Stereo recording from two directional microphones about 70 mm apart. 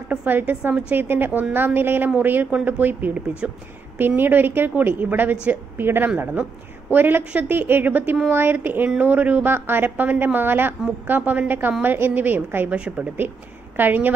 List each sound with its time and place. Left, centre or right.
0.1 s a sound: right
0.4 s a woman's voice: right
12.7 s a woman's voice: centre
13.7 s a woman's voice: right